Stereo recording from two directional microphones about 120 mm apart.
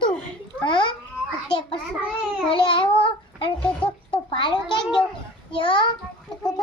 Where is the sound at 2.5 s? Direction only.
45° left (ahead or behind).